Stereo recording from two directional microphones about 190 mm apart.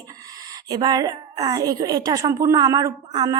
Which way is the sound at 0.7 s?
20° right (ahead or behind).